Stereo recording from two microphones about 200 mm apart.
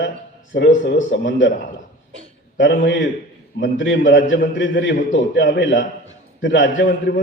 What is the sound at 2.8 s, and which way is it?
A man's voice, 65° left (ahead or behind).